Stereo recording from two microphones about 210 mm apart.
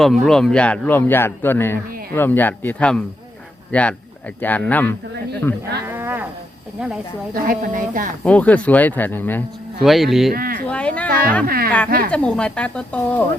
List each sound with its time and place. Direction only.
0.0 s a man's voice: centre (ahead or behind)
5.8 s a sound: 10° right (ahead or behind)
7.4 s speech: 40° right (ahead or behind)
8.2 s a man's voice: 5° left (ahead or behind)
10.3 s speech: 45° right (ahead or behind)
10.7 s music: 5° left (ahead or behind)
11.4 s speech: 45° right (ahead or behind)
12.1 s speech: 5° left (ahead or behind)